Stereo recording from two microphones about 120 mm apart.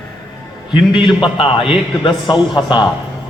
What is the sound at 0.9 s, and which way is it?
A man's voice, 45° left (ahead or behind).